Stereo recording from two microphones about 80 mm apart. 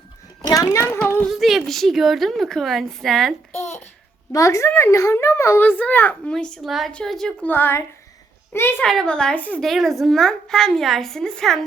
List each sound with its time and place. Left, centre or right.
0.4 s a woman's voice: left
1.3 s a woman's voice: centre
4.3 s speech: left
5.6 s a child's voice: left
6.3 s a woman's voice: centre
6.7 s a woman's voice: centre
7.4 s a child's voice: left
8.8 s a woman's voice: centre